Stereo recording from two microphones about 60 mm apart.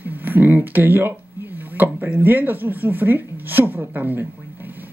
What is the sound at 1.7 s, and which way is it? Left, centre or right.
Speech, right.